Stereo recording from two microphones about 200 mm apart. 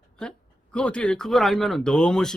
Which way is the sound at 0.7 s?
5° left (ahead or behind).